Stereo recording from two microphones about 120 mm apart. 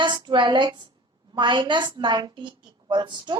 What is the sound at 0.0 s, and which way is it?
A woman's voice, 40° right (ahead or behind).